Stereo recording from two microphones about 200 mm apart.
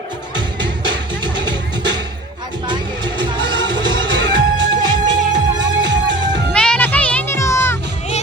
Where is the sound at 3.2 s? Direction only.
65° right (ahead or behind).